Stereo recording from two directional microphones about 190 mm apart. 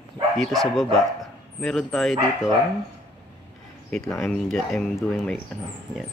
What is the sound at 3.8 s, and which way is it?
Speech, centre (ahead or behind).